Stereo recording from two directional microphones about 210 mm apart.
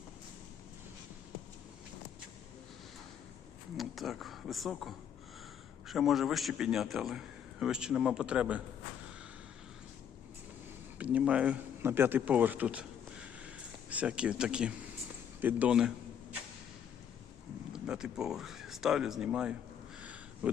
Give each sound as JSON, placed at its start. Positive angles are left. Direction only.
{"t": 3.8, "sound": "a man's voice", "side_deg": 0}
{"t": 10.9, "sound": "a man's voice", "side_deg": -5}
{"t": 17.7, "sound": "speech", "side_deg": -5}
{"t": 20.0, "sound": "a sound", "side_deg": -5}